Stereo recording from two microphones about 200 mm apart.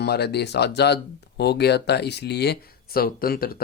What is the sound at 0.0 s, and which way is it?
Speech, 55° left (ahead or behind).